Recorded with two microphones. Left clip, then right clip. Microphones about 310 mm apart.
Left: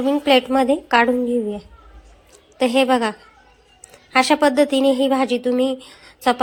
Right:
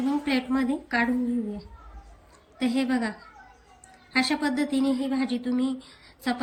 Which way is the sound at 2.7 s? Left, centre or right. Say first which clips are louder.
Left 12 dB; left.